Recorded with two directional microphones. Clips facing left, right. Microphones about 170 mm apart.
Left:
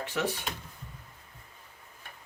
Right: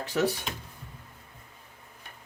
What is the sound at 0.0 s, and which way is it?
Speech, 40° right (ahead or behind).